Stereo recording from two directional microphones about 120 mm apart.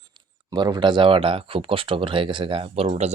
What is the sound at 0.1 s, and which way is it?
Speech, 35° right (ahead or behind).